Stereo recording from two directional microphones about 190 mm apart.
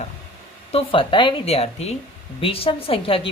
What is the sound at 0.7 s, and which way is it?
A woman's voice, 30° left (ahead or behind).